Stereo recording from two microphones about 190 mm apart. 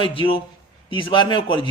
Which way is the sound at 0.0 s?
25° left (ahead or behind).